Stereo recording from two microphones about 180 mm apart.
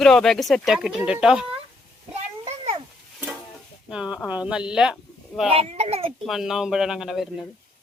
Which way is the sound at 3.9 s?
5° right (ahead or behind).